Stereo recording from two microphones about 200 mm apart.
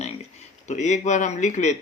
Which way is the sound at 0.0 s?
35° left (ahead or behind).